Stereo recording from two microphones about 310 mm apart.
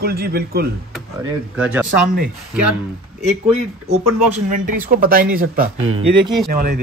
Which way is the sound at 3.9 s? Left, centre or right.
Right.